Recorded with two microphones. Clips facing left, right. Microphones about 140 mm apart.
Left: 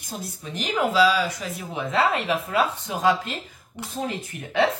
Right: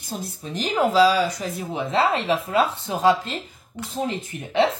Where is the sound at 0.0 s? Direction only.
30° right (ahead or behind).